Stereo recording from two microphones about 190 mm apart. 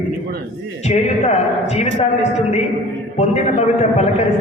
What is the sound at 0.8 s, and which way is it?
A man's voice, 35° left (ahead or behind).